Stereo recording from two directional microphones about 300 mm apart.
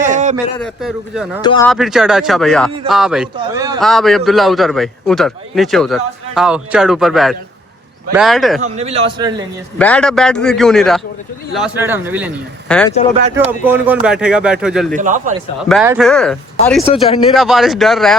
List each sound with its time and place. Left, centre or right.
0.0 s a sound: right
0.6 s a man's voice: centre
1.4 s speech: centre
1.7 s a man's voice: centre
3.3 s a man's voice: centre
3.8 s a man's voice: centre
8.6 s speech: right
9.7 s a man's voice: centre
14.9 s speech: right
15.7 s a man's voice: centre
16.8 s speech: centre
17.3 s a man's voice: centre